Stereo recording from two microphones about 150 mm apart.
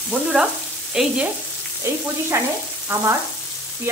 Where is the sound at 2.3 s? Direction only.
20° right (ahead or behind).